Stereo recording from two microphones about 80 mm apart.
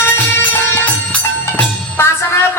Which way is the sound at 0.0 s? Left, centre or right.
Left.